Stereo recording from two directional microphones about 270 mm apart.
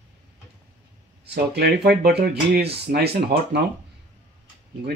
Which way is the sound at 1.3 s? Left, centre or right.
Right.